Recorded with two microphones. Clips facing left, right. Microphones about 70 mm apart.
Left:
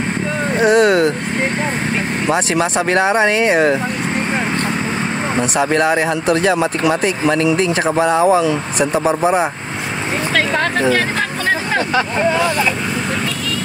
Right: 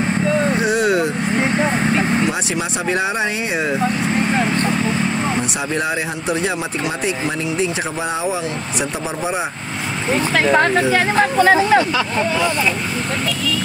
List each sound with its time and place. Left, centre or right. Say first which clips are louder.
0.6 s vehicle: left 5 dB; left
2.2 s speech: left 5 dB; left
5.7 s speech: left 6 dB; left
8.0 s speech: left 10 dB; left
10.9 s speech: right 1 dB; right